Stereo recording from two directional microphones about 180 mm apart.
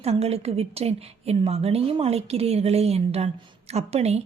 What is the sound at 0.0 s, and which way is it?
A woman's voice, 35° right (ahead or behind).